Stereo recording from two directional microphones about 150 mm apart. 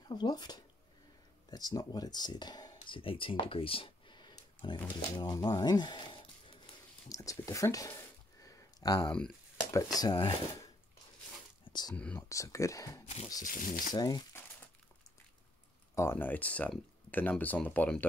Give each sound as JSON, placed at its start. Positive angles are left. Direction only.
{"t": 0.1, "sound": "speech", "side_deg": 25}
{"t": 7.1, "sound": "speech", "side_deg": 20}
{"t": 8.4, "sound": "a sound", "side_deg": 25}
{"t": 9.7, "sound": "speech", "side_deg": 25}
{"t": 11.9, "sound": "speech", "side_deg": 10}
{"t": 12.3, "sound": "speech", "side_deg": 20}
{"t": 13.0, "sound": "speech", "side_deg": 45}
{"t": 13.5, "sound": "speech", "side_deg": 65}
{"t": 13.9, "sound": "speech", "side_deg": 25}
{"t": 15.9, "sound": "speech", "side_deg": 15}